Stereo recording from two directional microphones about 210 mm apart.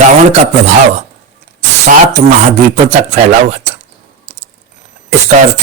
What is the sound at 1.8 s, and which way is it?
Speech, 35° right (ahead or behind).